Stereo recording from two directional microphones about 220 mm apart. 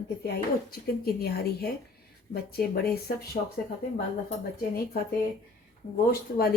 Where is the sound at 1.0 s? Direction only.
45° left (ahead or behind).